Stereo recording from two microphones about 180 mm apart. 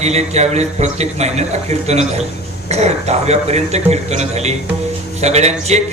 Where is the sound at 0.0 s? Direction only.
35° right (ahead or behind).